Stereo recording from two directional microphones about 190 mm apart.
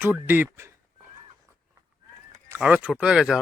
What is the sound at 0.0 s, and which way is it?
Speech, 10° right (ahead or behind).